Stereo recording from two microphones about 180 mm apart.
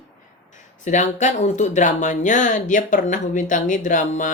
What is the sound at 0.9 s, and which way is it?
Speech, 40° left (ahead or behind).